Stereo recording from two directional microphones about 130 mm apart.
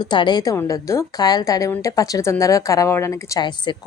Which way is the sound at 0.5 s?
20° left (ahead or behind).